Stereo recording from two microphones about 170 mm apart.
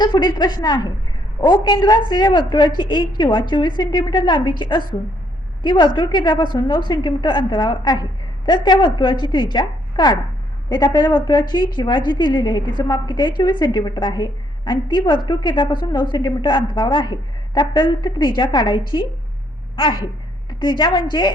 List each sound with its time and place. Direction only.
0.0 s a woman's voice: 25° left (ahead or behind)